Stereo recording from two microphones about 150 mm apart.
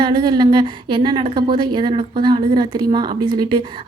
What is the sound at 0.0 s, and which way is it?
A woman's voice, 30° right (ahead or behind).